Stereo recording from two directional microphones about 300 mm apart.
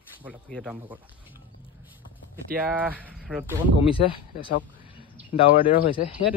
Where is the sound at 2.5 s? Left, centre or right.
Centre.